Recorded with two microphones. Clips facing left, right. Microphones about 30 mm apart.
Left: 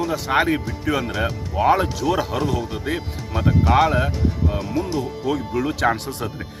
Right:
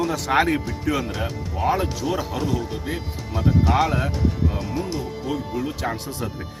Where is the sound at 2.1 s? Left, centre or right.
Left.